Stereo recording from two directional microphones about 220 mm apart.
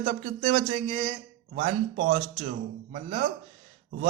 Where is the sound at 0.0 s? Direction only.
35° right (ahead or behind).